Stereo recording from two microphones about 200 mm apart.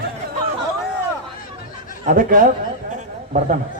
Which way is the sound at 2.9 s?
35° right (ahead or behind).